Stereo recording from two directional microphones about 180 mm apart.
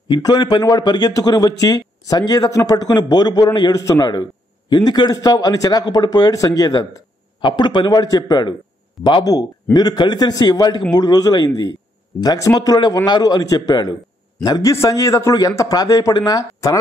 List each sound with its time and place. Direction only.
0.1 s a man's voice: 25° left (ahead or behind)